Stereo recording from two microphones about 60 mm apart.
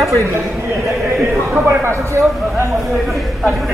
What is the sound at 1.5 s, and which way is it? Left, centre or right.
A man's voice, right.